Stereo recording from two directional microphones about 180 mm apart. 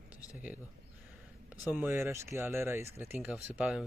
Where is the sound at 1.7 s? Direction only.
10° right (ahead or behind).